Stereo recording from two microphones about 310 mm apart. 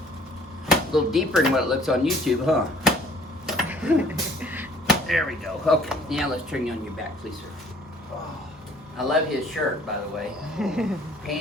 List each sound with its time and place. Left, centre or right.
0.7 s speech: centre
9.0 s speech: centre